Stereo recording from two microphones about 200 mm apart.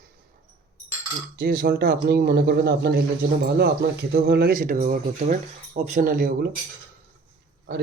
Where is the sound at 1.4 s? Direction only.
50° right (ahead or behind).